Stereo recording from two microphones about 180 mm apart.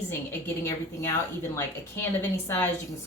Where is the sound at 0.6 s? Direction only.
15° left (ahead or behind).